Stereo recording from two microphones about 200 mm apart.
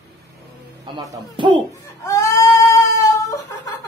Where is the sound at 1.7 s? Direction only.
15° left (ahead or behind).